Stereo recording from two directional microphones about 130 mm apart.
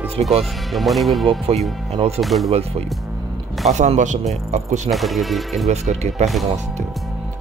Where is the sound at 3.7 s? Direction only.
65° right (ahead or behind).